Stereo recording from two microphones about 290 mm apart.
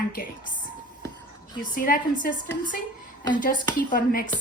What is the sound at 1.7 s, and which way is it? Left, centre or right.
A woman's voice, left.